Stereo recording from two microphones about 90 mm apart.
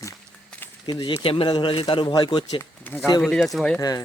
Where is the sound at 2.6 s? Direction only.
20° left (ahead or behind).